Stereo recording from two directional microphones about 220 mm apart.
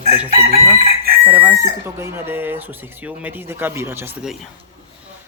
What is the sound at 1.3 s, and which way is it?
Speech, 10° right (ahead or behind).